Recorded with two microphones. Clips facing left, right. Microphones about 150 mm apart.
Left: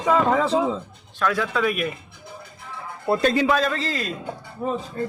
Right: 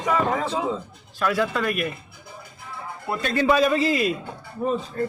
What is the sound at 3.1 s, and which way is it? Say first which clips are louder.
Speech: left 8 dB; 40° left (ahead or behind).